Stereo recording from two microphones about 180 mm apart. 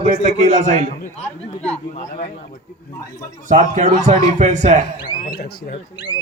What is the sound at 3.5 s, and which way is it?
A man's voice, 40° right (ahead or behind).